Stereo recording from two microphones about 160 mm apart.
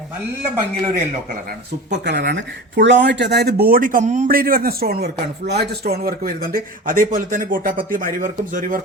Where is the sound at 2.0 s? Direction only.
90° right.